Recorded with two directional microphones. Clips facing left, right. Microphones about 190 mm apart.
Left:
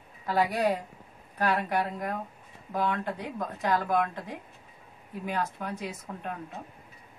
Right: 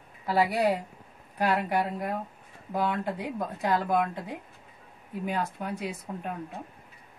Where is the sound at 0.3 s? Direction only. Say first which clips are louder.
Right 1 dB; 10° right (ahead or behind).